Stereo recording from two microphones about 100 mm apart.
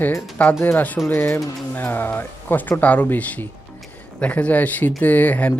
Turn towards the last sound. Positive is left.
turn(degrees=15)  # may be behind; listen again after turning